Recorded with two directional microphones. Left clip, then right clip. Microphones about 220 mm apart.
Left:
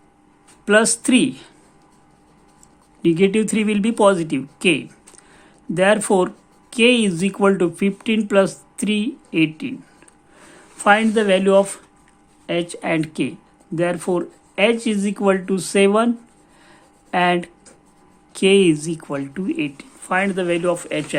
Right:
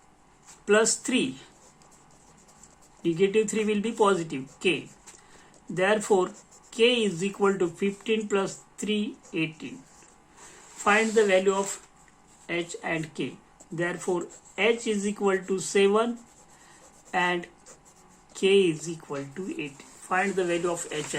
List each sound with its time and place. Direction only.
0.6 s speech: 50° left (ahead or behind)
3.0 s speech: 50° left (ahead or behind)
10.8 s speech: 50° left (ahead or behind)
17.1 s speech: 50° left (ahead or behind)